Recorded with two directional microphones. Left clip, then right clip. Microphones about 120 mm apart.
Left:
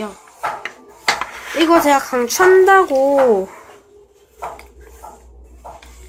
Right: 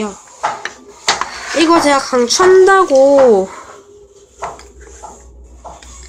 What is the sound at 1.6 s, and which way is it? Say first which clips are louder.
Speech: right 2 dB; 5° right (ahead or behind).